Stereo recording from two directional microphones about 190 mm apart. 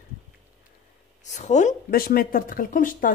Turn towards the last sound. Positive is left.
turn(degrees=45)  # may be behind; listen again after turning